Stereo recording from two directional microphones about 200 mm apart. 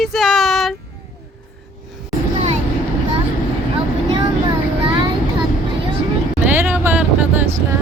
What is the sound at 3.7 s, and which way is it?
Vehicle, 25° right (ahead or behind).